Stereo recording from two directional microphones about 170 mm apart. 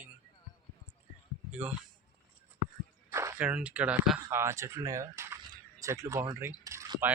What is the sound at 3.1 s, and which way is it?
Speech, 15° right (ahead or behind).